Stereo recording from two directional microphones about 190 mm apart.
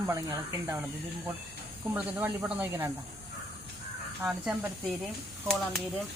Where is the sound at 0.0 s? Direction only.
20° right (ahead or behind).